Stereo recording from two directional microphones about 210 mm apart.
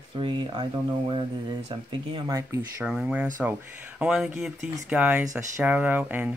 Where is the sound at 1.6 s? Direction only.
20° right (ahead or behind).